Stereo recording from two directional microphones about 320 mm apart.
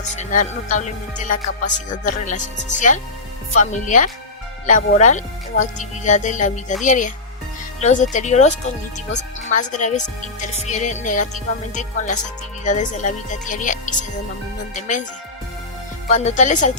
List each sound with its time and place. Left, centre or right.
0.2 s speech: left
16.0 s speech: left